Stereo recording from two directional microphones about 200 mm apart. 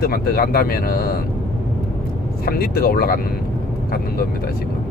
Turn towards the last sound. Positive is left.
turn(degrees=50)  # may be behind; listen again after turning